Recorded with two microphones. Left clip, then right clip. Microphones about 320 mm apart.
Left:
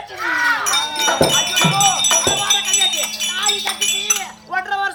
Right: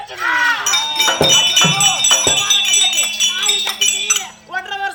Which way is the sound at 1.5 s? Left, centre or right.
Centre.